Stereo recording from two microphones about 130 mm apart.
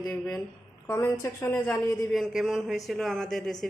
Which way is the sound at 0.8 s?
20° left (ahead or behind).